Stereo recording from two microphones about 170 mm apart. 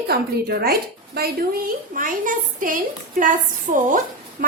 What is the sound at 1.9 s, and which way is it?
A child's voice, 50° right (ahead or behind).